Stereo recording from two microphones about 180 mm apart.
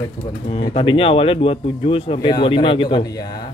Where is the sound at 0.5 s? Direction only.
30° left (ahead or behind).